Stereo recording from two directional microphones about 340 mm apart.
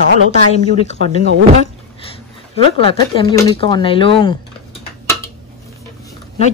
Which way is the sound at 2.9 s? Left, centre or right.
Centre.